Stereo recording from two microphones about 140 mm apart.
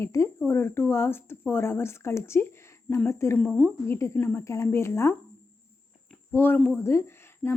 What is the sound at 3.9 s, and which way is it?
Speech, 15° left (ahead or behind).